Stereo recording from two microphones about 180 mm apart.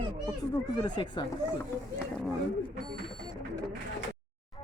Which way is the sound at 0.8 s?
25° left (ahead or behind).